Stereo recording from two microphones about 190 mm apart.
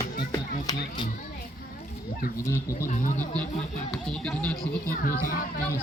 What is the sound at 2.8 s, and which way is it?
Speech, 40° left (ahead or behind).